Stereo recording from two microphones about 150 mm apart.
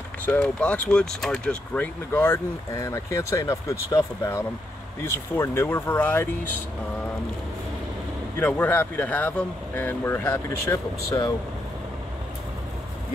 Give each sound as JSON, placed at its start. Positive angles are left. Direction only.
{"t": 0.2, "sound": "speech", "side_deg": 10}
{"t": 8.4, "sound": "speech", "side_deg": 10}